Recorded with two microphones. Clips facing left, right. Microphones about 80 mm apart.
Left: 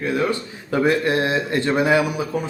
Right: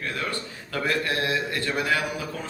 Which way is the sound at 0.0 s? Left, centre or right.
Centre.